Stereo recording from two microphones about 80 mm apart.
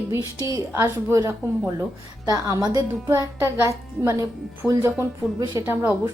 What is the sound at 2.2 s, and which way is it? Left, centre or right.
Speech, right.